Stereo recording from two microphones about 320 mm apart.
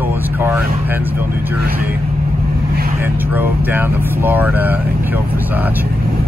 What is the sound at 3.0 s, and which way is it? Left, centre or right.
Speech, centre.